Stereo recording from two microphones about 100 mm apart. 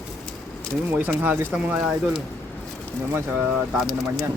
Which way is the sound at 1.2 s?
20° right (ahead or behind).